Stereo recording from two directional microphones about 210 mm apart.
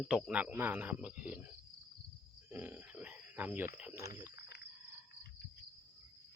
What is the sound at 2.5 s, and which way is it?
Grunt, 10° right (ahead or behind).